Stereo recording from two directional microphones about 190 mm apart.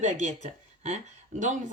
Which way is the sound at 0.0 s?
40° right (ahead or behind).